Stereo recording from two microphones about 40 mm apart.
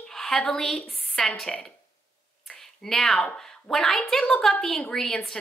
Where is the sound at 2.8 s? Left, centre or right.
Centre.